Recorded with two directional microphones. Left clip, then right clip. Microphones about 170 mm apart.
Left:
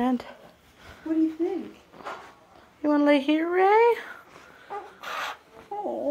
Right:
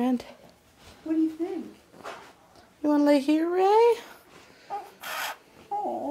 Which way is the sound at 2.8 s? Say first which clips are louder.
Left 1 dB; 10° right (ahead or behind).